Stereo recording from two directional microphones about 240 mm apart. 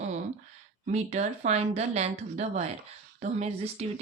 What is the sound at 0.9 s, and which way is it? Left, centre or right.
Speech, right.